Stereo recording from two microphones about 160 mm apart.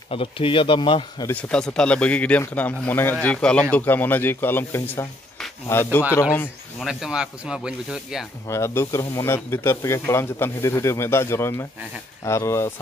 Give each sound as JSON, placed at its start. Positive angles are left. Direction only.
{"t": 0.1, "sound": "speech", "side_deg": 35}
{"t": 1.2, "sound": "a man's voice", "side_deg": 10}
{"t": 6.8, "sound": "speech", "side_deg": 0}
{"t": 8.5, "sound": "a man's voice", "side_deg": 15}